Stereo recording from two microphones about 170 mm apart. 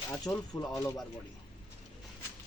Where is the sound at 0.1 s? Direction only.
20° left (ahead or behind).